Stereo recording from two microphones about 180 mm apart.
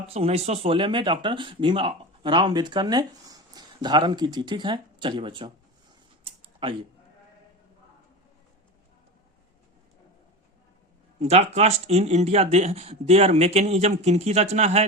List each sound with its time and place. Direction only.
0.1 s speech: 35° right (ahead or behind)
6.2 s a sound: 30° right (ahead or behind)
11.2 s speech: 35° right (ahead or behind)